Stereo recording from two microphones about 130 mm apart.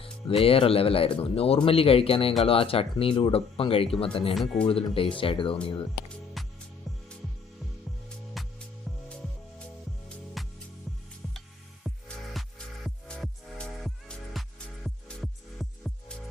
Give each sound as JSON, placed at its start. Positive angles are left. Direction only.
{"t": 0.0, "sound": "speech", "side_deg": 45}
{"t": 6.4, "sound": "music", "side_deg": 0}
{"t": 8.4, "sound": "music", "side_deg": 0}
{"t": 10.4, "sound": "music", "side_deg": 0}